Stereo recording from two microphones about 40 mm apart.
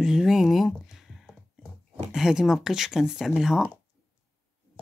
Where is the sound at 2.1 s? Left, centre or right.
Centre.